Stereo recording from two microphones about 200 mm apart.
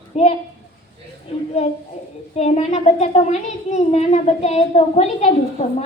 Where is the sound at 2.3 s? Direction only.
35° left (ahead or behind).